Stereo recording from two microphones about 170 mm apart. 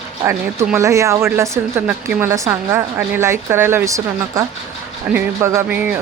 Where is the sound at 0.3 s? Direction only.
15° right (ahead or behind).